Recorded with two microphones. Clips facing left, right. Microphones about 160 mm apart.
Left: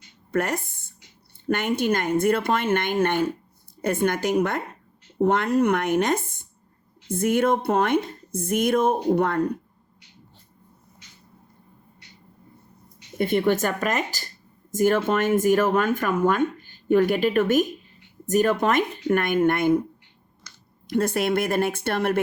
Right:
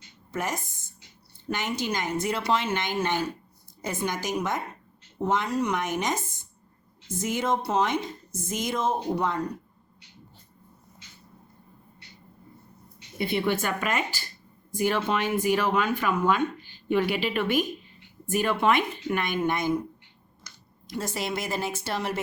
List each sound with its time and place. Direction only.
0.3 s speech: 60° left (ahead or behind)
13.1 s speech: 45° left (ahead or behind)
20.8 s speech: 60° left (ahead or behind)